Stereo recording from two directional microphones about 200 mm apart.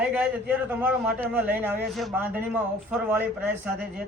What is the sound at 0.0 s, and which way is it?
Speech, 5° right (ahead or behind).